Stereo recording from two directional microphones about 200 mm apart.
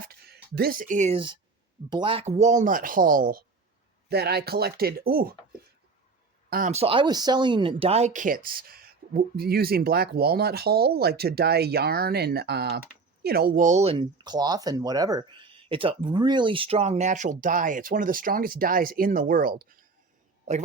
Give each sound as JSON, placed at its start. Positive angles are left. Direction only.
{"t": 0.0, "sound": "speech", "side_deg": -50}
{"t": 6.5, "sound": "speech", "side_deg": -40}